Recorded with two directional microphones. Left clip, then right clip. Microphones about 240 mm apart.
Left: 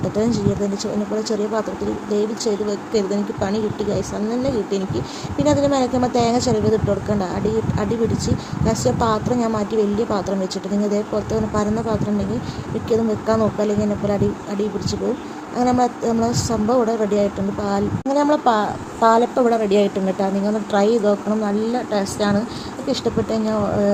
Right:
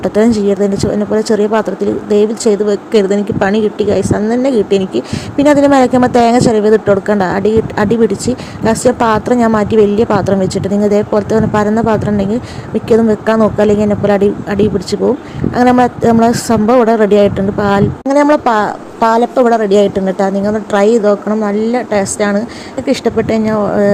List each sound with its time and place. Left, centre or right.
0.0 s speech: right